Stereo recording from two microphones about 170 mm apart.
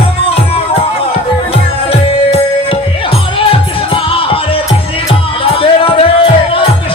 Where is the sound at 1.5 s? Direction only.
35° left (ahead or behind).